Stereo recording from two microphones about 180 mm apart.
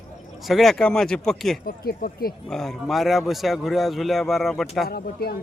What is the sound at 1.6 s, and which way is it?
Speech, 55° left (ahead or behind).